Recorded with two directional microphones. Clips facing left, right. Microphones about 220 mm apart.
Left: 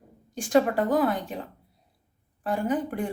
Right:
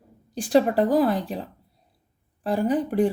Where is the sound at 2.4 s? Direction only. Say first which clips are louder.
Right 4 dB; 35° right (ahead or behind).